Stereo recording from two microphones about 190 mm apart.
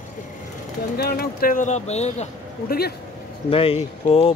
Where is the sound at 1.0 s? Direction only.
55° left (ahead or behind); by 2.3 s 35° left (ahead or behind).